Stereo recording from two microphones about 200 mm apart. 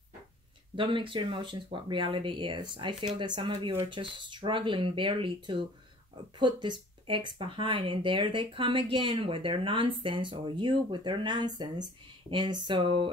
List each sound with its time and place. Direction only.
0.7 s speech: 25° right (ahead or behind)